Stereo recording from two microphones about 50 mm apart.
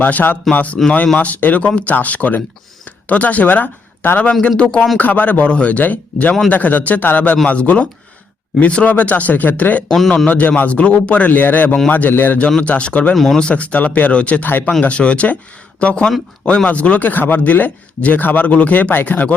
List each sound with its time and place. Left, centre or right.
0.0 s speech: left
4.4 s speech: left
4.9 s speech: left
11.3 s speech: left
12.6 s speech: left
13.1 s speech: centre
13.5 s speech: left